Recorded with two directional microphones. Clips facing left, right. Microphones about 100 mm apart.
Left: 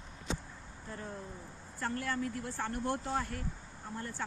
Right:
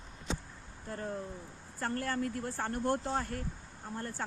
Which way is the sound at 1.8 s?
45° right (ahead or behind).